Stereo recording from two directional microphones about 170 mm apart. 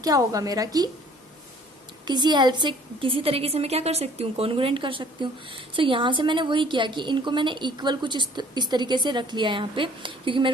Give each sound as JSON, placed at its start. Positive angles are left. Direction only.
{"t": 0.0, "sound": "a woman's voice", "side_deg": -20}
{"t": 2.0, "sound": "a woman's voice", "side_deg": -25}